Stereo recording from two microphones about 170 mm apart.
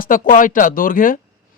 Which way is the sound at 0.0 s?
55° left (ahead or behind).